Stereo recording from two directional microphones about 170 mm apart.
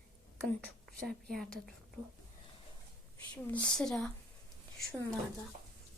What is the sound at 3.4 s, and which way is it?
Speech, 10° left (ahead or behind).